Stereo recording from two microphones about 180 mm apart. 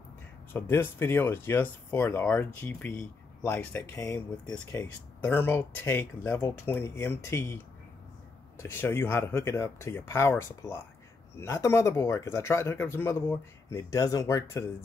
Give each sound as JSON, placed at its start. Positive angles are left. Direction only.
{"t": 0.5, "sound": "speech", "side_deg": 15}